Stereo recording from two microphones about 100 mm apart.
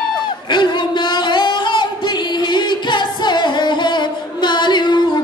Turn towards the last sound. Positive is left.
turn(degrees=50)  # may be behind; listen again after turning